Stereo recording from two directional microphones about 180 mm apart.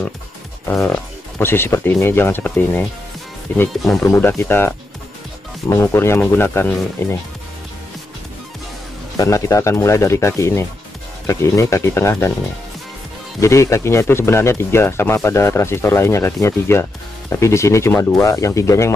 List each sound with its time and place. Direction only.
0.7 s speech: 10° left (ahead or behind)
9.1 s speech: 20° left (ahead or behind)
13.4 s speech: 15° left (ahead or behind)